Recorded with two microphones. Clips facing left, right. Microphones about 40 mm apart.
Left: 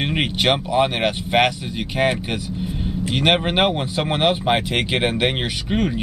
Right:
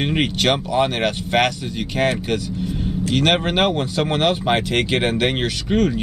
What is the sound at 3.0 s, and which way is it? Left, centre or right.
Speech, centre.